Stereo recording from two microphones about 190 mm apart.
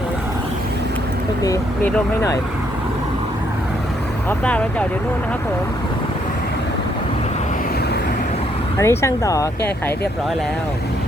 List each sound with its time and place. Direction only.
1.4 s speech: 15° left (ahead or behind)
4.3 s speech: 5° left (ahead or behind)
8.8 s speech: 15° left (ahead or behind)